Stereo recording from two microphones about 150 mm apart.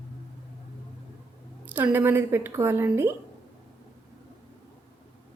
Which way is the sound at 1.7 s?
10° right (ahead or behind).